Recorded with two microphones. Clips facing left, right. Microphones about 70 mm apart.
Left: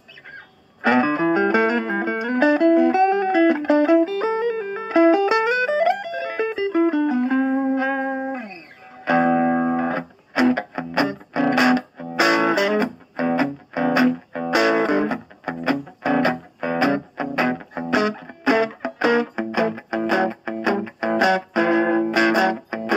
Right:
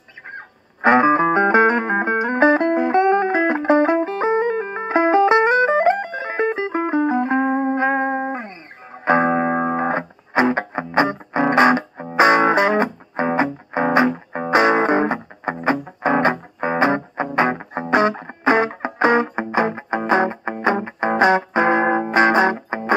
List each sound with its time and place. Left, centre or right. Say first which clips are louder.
0.8 s music: right 4 dB; right